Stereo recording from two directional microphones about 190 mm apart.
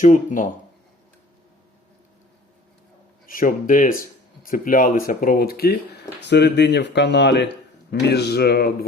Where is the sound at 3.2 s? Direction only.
45° left (ahead or behind).